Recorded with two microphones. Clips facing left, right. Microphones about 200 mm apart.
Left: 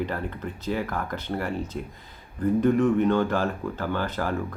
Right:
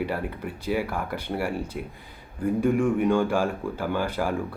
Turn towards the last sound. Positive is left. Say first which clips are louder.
# right 1 dB
turn(degrees=-10)  # may be behind; listen again after turning